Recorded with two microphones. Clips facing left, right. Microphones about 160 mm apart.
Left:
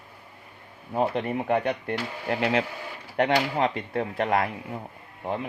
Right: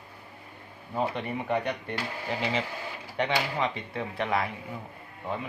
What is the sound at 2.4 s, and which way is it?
Speech, 60° left (ahead or behind).